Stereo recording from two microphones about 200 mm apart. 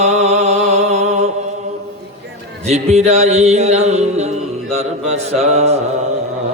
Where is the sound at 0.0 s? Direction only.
35° right (ahead or behind).